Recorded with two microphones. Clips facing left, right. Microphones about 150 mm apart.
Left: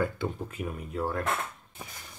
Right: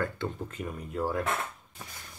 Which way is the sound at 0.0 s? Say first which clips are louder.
Left 2 dB; 10° left (ahead or behind).